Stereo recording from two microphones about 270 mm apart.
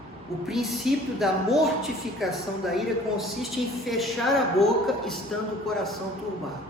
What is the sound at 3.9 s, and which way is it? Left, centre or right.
Speech, centre.